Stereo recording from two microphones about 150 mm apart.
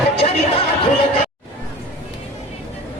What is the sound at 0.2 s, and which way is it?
Chatter, 40° left (ahead or behind).